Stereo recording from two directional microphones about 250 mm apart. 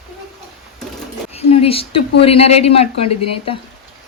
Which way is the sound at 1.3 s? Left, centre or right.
Left.